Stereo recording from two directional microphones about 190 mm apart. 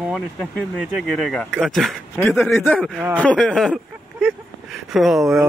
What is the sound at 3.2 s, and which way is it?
Speech, 5° left (ahead or behind).